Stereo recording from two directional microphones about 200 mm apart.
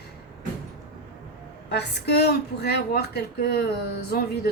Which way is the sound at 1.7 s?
55° left (ahead or behind).